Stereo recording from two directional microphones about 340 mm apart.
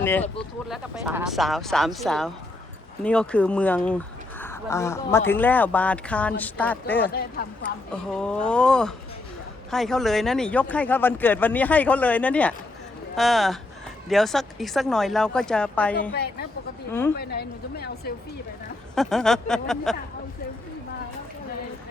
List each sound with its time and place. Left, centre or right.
0.0 s speech: centre
8.1 s speech: centre
16.1 s a woman's voice: left
18.9 s speech: centre